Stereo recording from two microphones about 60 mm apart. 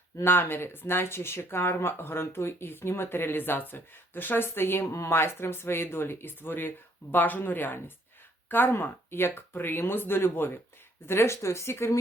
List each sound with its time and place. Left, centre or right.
0.3 s speech: left
4.8 s speech: left
5.1 s speech: left